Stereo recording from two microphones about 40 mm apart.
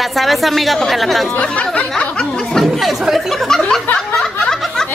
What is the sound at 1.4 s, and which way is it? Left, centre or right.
Speech, left.